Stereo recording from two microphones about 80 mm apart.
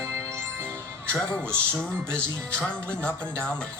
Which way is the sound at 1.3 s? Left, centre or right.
Centre.